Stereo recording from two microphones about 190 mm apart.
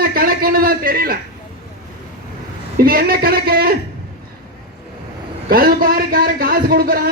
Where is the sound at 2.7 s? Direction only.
50° right (ahead or behind).